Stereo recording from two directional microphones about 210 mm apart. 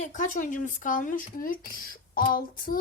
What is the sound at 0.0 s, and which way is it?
Speech, 35° left (ahead or behind).